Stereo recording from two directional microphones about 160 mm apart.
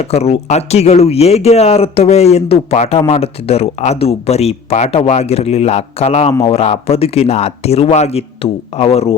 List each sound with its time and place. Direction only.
0.0 s speech: 40° left (ahead or behind)